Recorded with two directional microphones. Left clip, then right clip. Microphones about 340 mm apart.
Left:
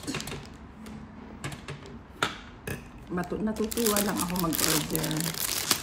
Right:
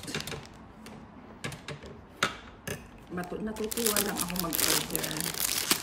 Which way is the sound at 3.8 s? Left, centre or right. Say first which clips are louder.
Left 2 dB; centre.